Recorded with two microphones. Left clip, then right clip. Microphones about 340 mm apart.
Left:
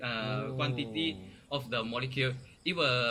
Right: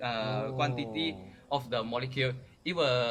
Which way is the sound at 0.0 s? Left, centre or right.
Centre.